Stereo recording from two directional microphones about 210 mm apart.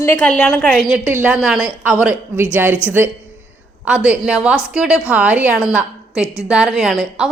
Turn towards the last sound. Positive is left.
turn(degrees=0)  # may be behind; listen again after turning